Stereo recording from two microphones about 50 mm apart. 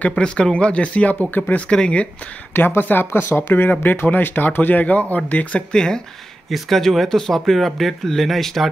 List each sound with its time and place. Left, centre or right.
0.1 s speech: centre
1.4 s speech: left
1.7 s speech: left
2.5 s speech: left
3.1 s speech: left
3.8 s speech: left
5.7 s speech: centre